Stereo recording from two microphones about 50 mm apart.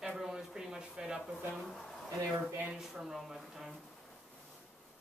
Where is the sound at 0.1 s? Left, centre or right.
Centre.